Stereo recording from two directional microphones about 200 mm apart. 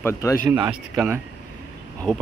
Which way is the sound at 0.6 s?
10° right (ahead or behind).